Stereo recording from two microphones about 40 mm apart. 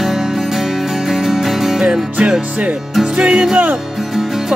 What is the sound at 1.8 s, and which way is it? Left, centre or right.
Music, right.